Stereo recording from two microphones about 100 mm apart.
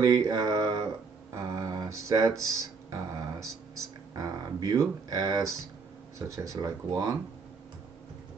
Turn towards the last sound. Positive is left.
turn(degrees=-35)  # may be behind; listen again after turning